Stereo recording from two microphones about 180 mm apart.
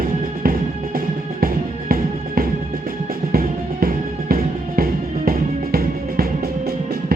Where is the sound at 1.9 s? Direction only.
55° right (ahead or behind).